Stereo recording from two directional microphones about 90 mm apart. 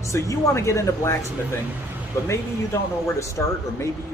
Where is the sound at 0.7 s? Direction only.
35° left (ahead or behind).